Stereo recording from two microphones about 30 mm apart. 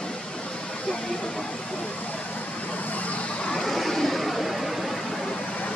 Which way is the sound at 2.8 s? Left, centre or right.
Left.